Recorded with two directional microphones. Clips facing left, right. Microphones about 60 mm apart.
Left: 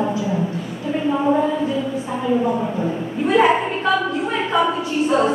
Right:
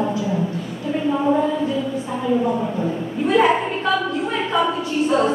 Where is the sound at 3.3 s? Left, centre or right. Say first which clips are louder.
Left 1 dB; left.